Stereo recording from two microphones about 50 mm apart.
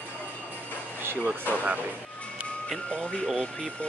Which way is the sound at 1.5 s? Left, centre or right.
Right.